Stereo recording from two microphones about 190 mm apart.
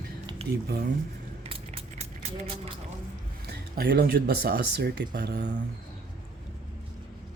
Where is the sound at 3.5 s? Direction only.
60° right (ahead or behind).